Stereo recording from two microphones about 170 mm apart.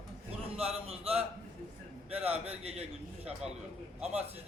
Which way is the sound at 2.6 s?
40° right (ahead or behind).